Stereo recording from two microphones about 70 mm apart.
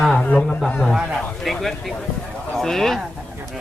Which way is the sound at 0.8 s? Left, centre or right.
Centre.